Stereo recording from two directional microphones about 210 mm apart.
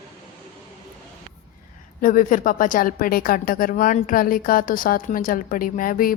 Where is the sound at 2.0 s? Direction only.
40° left (ahead or behind).